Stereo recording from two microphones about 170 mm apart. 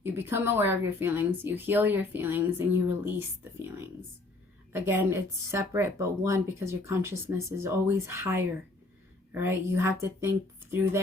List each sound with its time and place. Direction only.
0.0 s a woman's voice: 15° right (ahead or behind)